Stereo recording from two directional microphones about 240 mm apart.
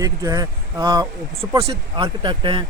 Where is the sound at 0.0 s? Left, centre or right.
Centre.